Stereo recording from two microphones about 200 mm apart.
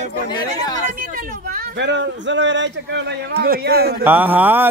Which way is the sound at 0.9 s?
45° right (ahead or behind).